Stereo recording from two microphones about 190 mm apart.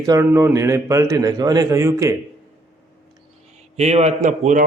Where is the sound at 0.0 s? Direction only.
15° right (ahead or behind).